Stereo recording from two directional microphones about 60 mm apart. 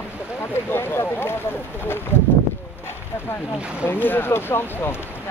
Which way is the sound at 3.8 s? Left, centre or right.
Left.